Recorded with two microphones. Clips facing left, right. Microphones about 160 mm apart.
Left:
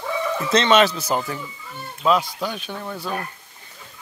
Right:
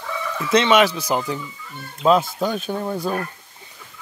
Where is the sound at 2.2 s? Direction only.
40° right (ahead or behind).